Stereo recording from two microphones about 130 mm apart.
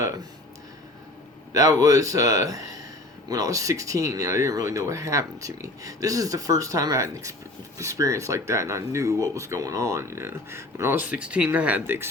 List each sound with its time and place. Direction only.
1.5 s speech: 25° right (ahead or behind)